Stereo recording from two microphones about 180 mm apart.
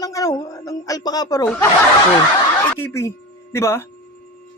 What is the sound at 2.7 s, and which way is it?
Speech, 15° left (ahead or behind).